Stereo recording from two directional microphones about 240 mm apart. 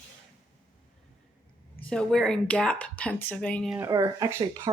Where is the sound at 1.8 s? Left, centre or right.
Centre.